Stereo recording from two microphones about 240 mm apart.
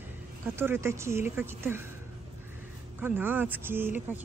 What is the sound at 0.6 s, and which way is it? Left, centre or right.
Speech, centre.